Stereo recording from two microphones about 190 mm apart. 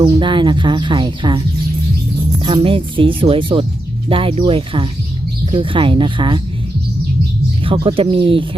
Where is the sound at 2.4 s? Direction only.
25° right (ahead or behind).